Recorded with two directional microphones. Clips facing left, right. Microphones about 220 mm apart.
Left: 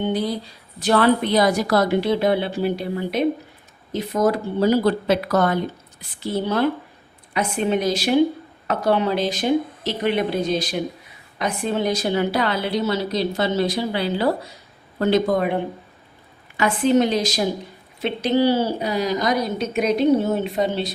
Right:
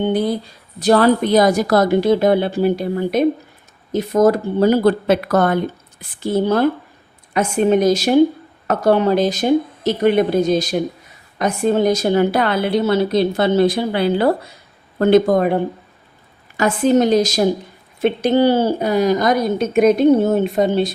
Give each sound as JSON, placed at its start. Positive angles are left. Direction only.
{"t": 0.1, "sound": "speech", "side_deg": -55}
{"t": 0.8, "sound": "speech", "side_deg": -40}